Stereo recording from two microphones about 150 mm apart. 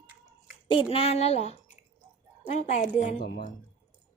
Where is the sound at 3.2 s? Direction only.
90° left.